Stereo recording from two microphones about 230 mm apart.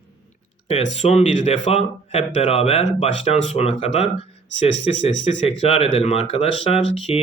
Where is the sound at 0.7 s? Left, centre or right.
Left.